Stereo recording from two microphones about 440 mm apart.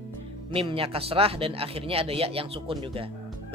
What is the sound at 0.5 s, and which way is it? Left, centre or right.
Speech, centre.